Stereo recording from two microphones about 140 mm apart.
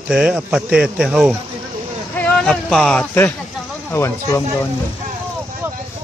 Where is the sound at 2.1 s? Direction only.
10° left (ahead or behind).